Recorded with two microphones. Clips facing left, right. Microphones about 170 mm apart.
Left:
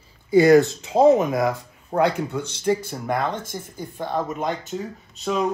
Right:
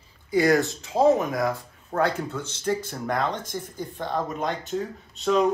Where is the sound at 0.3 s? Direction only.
25° left (ahead or behind).